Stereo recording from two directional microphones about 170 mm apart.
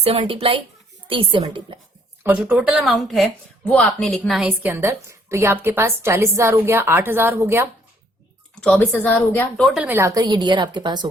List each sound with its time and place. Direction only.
0.0 s a woman's voice: 30° right (ahead or behind)
2.2 s speech: 10° right (ahead or behind)
8.6 s speech: 10° left (ahead or behind); by 11.1 s 25° right (ahead or behind)